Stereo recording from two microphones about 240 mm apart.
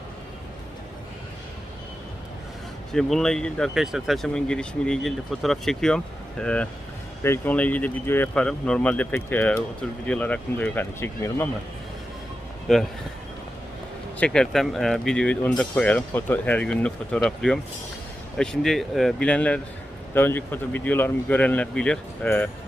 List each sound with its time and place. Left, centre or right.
2.9 s speech: centre
12.7 s speech: centre
14.2 s speech: centre